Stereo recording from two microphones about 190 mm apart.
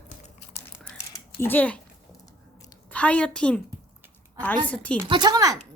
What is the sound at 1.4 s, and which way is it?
Speech, 10° left (ahead or behind).